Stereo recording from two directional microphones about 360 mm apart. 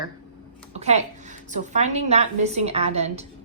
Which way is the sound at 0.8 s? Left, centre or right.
Centre.